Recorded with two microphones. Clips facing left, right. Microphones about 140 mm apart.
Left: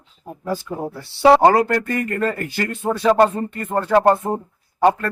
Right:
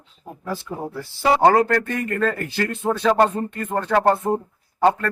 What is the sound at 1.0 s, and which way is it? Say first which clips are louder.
Speech: left 7 dB; 70° left (ahead or behind).